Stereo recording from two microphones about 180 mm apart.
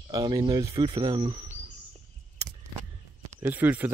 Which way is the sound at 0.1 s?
20° right (ahead or behind).